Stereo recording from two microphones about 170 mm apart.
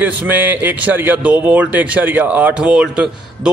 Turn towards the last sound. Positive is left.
turn(degrees=-5)  # may be behind; listen again after turning